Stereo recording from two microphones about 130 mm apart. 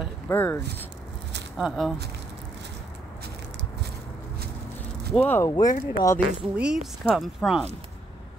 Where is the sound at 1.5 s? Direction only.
Centre (ahead or behind).